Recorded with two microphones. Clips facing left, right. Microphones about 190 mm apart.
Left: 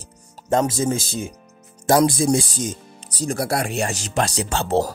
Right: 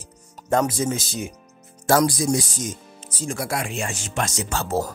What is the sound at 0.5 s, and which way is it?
Speech, 25° left (ahead or behind).